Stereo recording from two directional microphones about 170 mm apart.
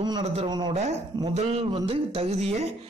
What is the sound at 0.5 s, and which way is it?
Speech, 25° right (ahead or behind).